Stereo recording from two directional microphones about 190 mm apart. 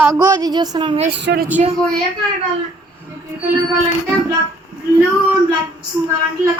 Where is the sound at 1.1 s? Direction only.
60° right (ahead or behind).